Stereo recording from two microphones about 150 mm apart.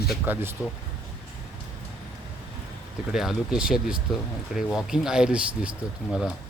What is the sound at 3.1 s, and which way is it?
Speech, 5° right (ahead or behind).